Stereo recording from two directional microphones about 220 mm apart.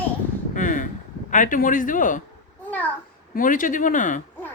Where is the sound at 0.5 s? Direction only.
35° left (ahead or behind).